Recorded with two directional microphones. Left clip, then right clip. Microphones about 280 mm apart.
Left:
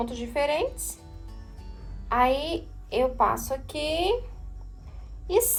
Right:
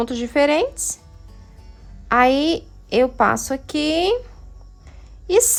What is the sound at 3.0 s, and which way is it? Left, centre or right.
A woman's voice, right.